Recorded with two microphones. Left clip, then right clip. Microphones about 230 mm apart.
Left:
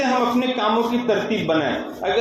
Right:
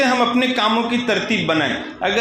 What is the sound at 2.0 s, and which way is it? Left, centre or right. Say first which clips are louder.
Speech: right 2 dB; right.